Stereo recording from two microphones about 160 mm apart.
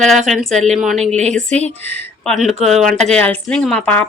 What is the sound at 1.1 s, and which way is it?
Speech, 45° right (ahead or behind).